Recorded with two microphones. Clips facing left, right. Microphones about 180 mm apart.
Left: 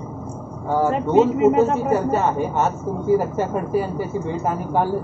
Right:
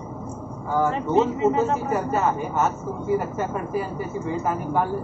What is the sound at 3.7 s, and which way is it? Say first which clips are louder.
Speech: left 5 dB; 30° left (ahead or behind).